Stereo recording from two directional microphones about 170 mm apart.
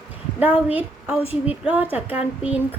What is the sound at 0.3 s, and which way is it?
A woman's voice, 10° right (ahead or behind).